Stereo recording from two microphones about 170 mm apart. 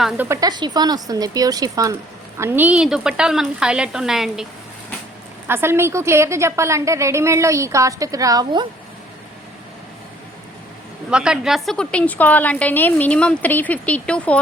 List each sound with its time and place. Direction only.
0.3 s a woman's voice: 20° right (ahead or behind); by 4.4 s centre (ahead or behind)
5.5 s a woman's voice: 15° right (ahead or behind)
11.1 s a woman's voice: 5° right (ahead or behind)